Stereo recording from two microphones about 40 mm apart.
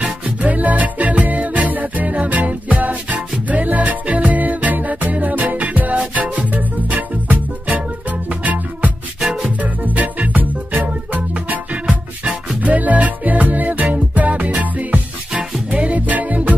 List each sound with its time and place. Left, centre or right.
0.0 s music: right
9.2 s music: centre
9.6 s music: right